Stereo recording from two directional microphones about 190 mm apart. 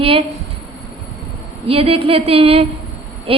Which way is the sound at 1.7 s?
30° right (ahead or behind).